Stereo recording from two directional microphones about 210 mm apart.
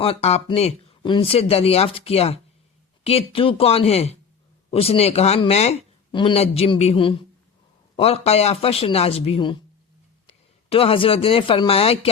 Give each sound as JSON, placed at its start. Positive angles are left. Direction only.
{"t": 0.0, "sound": "speech", "side_deg": 30}